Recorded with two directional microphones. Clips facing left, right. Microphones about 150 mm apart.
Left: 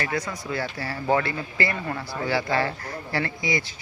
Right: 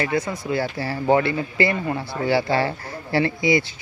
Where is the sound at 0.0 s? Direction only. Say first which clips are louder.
Right 5 dB; 25° right (ahead or behind).